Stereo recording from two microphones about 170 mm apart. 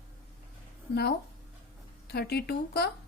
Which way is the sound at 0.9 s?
75° left (ahead or behind).